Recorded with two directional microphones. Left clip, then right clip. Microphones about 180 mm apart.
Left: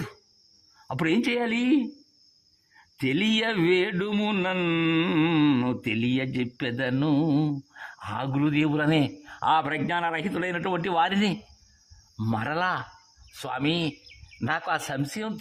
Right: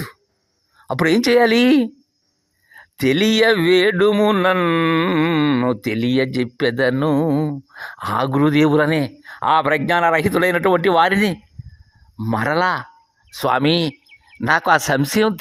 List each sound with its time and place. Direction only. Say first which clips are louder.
0.9 s speech: right 10 dB; 30° right (ahead or behind); by 1.9 s 45° right (ahead or behind)
2.7 s speech: right 9 dB; 35° right (ahead or behind)
7.1 s a sound: right 6 dB; 10° right (ahead or behind)
7.7 s speech: right 12 dB; 30° right (ahead or behind)
8.9 s speech: right 4 dB; 15° right (ahead or behind)
9.6 s speech: right 11 dB; 35° right (ahead or behind)
13.3 s speech: right 11 dB; 40° right (ahead or behind)